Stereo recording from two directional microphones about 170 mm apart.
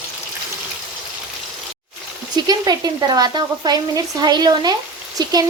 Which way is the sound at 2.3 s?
20° right (ahead or behind).